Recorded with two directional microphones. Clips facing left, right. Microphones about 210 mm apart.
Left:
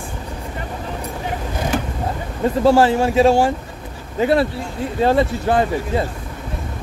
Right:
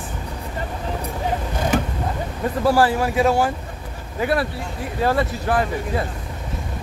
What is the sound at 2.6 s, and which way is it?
Speech, 25° left (ahead or behind).